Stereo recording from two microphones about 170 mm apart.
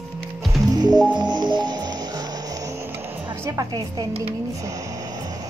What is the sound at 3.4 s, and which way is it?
Speech, 20° right (ahead or behind).